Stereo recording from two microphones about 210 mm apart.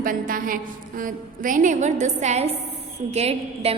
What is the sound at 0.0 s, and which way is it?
A woman's voice, 40° right (ahead or behind).